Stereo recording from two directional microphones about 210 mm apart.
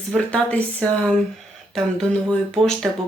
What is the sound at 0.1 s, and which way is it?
Speech, 5° left (ahead or behind).